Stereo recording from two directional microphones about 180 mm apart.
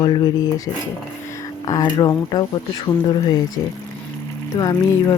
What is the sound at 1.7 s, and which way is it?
Speech, 20° left (ahead or behind).